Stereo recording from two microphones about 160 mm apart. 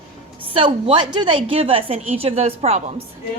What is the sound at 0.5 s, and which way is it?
A woman's voice, 30° right (ahead or behind).